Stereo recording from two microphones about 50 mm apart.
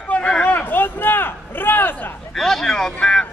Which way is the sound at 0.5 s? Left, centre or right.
Left.